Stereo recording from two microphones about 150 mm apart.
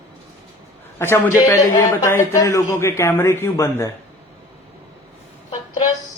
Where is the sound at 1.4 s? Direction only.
25° left (ahead or behind).